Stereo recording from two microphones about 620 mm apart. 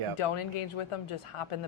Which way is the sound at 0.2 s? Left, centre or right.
Left.